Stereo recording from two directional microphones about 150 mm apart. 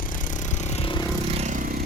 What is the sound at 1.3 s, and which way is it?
Vehicle, 50° right (ahead or behind).